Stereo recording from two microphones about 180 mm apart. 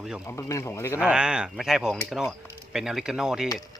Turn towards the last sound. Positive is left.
turn(degrees=-5)  # may be behind; listen again after turning